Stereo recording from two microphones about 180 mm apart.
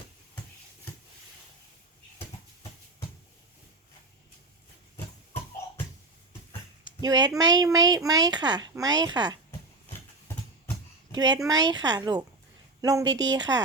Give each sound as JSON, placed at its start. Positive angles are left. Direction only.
{"t": 7.0, "sound": "a woman's voice", "side_deg": -20}
{"t": 11.4, "sound": "a woman's voice", "side_deg": -20}